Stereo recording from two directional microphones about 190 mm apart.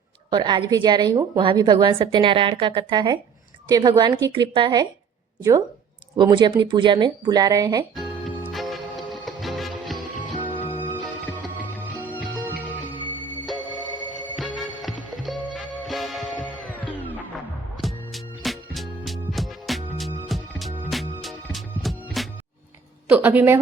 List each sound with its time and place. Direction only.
0.3 s a woman's voice: 25° right (ahead or behind)
7.9 s music: 5° right (ahead or behind)
14.3 s music: centre (ahead or behind)
23.0 s a woman's voice: 10° right (ahead or behind)